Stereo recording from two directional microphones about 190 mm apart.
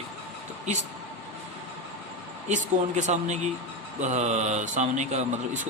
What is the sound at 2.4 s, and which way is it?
A man's voice, 40° right (ahead or behind).